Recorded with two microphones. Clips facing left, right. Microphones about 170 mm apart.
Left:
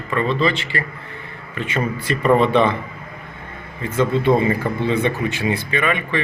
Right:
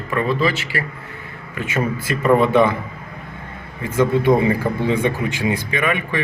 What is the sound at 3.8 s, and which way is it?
Speech, 10° right (ahead or behind).